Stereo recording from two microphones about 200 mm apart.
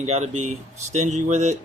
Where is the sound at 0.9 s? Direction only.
35° right (ahead or behind).